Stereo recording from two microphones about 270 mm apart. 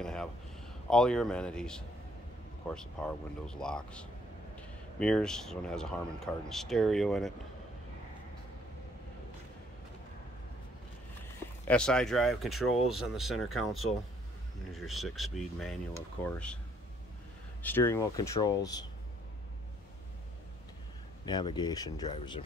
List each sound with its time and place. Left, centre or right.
0.0 s a sound: centre
0.8 s speech: centre
11.6 s speech: centre
17.6 s speech: centre
21.3 s speech: centre